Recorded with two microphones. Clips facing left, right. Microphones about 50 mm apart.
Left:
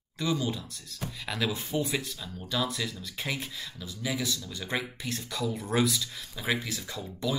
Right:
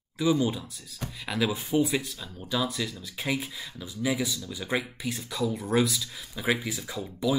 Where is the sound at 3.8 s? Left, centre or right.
Centre.